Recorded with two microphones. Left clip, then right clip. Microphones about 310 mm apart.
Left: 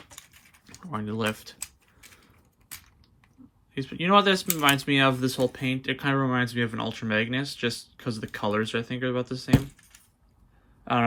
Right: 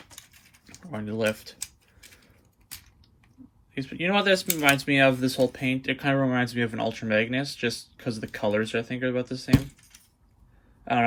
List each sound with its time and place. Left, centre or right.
0.2 s dog: centre
0.9 s a sound: centre
3.8 s speech: centre